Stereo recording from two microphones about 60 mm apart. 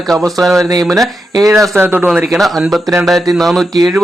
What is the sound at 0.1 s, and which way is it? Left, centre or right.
Speech, centre.